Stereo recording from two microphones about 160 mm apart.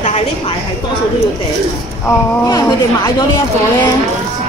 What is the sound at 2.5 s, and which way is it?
Speech, 25° left (ahead or behind).